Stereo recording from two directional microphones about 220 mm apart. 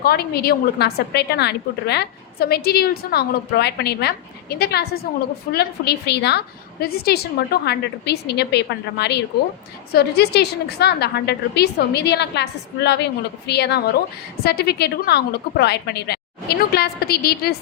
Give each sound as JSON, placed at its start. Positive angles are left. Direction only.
{"t": 0.0, "sound": "a woman's voice", "side_deg": 45}